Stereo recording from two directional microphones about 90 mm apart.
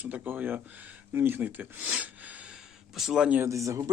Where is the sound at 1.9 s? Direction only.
15° right (ahead or behind).